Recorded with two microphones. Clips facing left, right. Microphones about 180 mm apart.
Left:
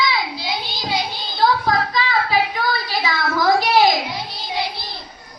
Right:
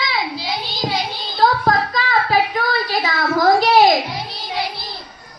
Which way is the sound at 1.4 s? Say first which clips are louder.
Right 1 dB; 50° right (ahead or behind).